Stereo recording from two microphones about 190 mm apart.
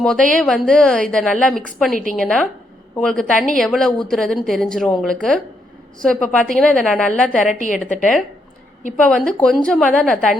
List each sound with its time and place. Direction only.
0.0 s a woman's voice: 5° left (ahead or behind)
7.6 s a woman's voice: 45° left (ahead or behind)
9.0 s a woman's voice: 5° left (ahead or behind)